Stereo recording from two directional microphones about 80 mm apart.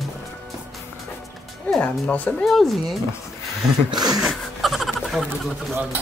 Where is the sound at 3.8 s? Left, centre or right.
Right.